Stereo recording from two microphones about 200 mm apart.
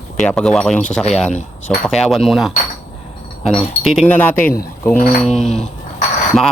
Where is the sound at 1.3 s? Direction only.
35° left (ahead or behind).